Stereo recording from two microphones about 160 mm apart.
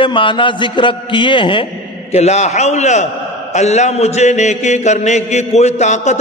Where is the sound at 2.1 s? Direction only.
45° left (ahead or behind).